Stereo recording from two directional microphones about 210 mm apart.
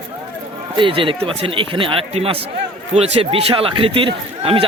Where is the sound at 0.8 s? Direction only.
25° right (ahead or behind).